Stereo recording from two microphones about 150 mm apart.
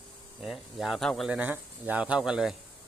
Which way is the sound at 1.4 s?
10° right (ahead or behind).